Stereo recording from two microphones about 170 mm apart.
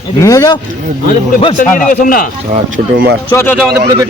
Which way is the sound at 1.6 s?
55° left (ahead or behind).